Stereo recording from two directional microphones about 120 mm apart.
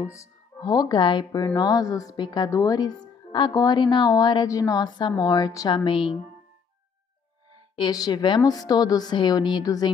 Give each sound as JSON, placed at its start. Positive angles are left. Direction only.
{"t": 0.0, "sound": "speech", "side_deg": 25}
{"t": 5.9, "sound": "a woman's voice", "side_deg": 45}
{"t": 7.9, "sound": "speech", "side_deg": 35}